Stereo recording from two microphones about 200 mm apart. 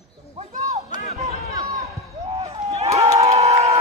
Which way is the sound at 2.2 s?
30° right (ahead or behind).